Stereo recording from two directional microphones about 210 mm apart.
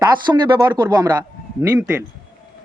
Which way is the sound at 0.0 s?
20° right (ahead or behind).